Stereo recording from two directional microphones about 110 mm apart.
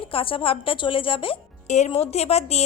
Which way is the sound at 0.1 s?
55° left (ahead or behind).